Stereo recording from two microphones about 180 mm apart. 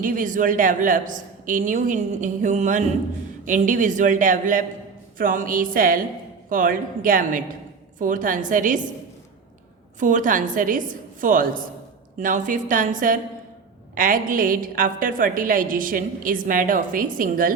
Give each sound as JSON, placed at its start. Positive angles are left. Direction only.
{"t": 0.0, "sound": "a woman's voice", "side_deg": -50}
{"t": 10.0, "sound": "a woman's voice", "side_deg": -45}